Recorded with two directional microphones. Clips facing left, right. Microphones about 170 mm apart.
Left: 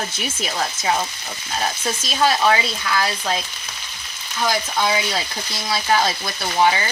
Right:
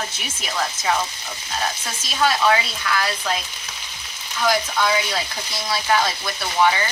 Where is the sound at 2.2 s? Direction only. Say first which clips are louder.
Left 1 dB; 30° left (ahead or behind).